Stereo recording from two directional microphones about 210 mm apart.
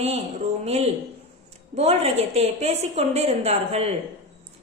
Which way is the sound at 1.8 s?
30° right (ahead or behind).